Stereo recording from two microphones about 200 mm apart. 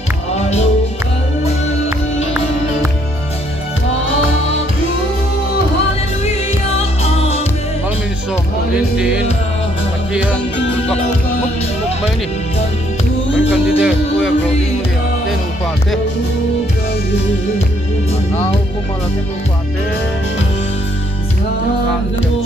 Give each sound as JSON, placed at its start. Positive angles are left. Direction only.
{"t": 0.3, "sound": "music", "side_deg": 35}
{"t": 6.7, "sound": "music", "side_deg": 30}
{"t": 8.7, "sound": "music", "side_deg": -5}
{"t": 13.5, "sound": "music", "side_deg": -5}